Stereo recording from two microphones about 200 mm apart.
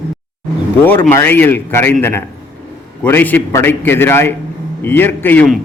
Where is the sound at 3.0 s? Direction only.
10° left (ahead or behind).